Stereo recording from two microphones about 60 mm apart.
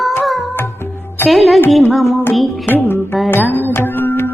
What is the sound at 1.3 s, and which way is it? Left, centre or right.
Speech, centre.